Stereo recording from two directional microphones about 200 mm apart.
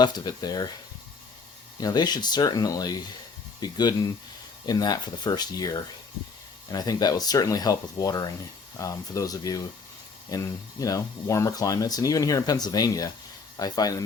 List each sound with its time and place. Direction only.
0.0 s speech: 20° left (ahead or behind)
1.8 s speech: 20° left (ahead or behind)